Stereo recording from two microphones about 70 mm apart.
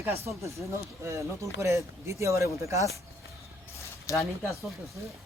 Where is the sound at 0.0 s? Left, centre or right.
Right.